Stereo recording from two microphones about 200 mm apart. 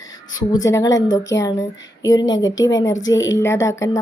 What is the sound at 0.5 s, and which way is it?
A woman's voice, 15° left (ahead or behind).